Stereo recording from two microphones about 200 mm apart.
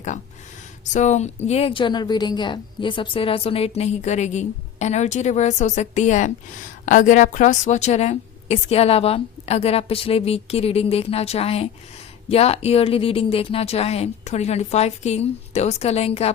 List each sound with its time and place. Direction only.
0.9 s a woman's voice: 35° left (ahead or behind)